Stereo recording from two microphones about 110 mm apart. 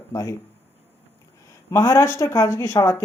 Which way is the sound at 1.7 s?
30° left (ahead or behind).